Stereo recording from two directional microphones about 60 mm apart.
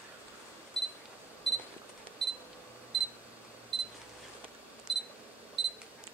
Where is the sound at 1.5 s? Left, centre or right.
Centre.